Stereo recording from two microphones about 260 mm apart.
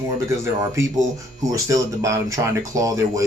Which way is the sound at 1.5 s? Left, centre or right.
Centre.